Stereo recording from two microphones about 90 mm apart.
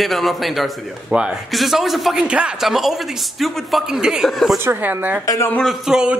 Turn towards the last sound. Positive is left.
turn(degrees=-10)  # may be behind; listen again after turning